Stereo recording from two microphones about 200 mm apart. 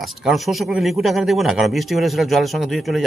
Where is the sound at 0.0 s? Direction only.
Centre (ahead or behind).